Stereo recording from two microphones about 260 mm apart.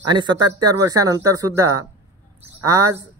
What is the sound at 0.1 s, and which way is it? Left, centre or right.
A man's voice, centre.